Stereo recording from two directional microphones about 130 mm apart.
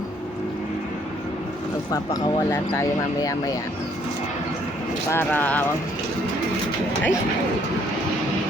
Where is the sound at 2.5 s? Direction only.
20° left (ahead or behind).